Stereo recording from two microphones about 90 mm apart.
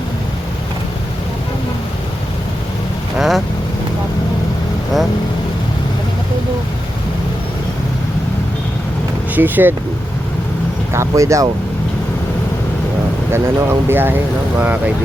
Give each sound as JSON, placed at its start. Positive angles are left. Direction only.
{"t": 3.2, "sound": "vehicle", "side_deg": 0}
{"t": 9.3, "sound": "speech", "side_deg": -20}
{"t": 10.9, "sound": "speech", "side_deg": -35}
{"t": 13.3, "sound": "speech", "side_deg": -25}